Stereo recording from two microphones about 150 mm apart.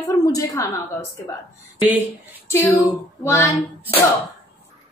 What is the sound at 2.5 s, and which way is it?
A child's voice, 15° left (ahead or behind).